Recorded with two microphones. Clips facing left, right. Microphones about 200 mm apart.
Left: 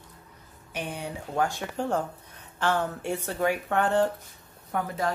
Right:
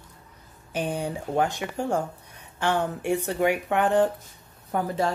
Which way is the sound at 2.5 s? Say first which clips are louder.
Right 2 dB; 15° right (ahead or behind).